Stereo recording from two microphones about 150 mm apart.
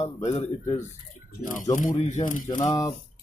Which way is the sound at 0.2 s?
50° left (ahead or behind).